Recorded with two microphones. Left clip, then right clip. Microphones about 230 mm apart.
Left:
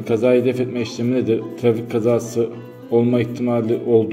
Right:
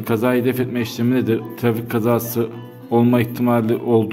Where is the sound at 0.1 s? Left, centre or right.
Right.